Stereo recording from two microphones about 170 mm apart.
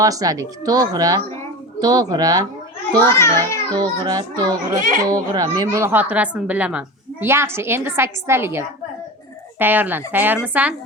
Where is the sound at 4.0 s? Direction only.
20° right (ahead or behind).